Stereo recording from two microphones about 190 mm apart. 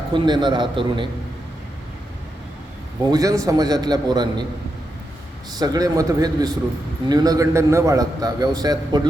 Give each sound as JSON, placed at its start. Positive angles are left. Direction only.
{"t": 0.1, "sound": "a man's voice", "side_deg": -25}
{"t": 3.1, "sound": "a man's voice", "side_deg": -20}
{"t": 5.5, "sound": "a man's voice", "side_deg": -20}